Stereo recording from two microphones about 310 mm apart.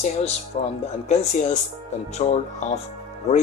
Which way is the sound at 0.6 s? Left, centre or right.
Left.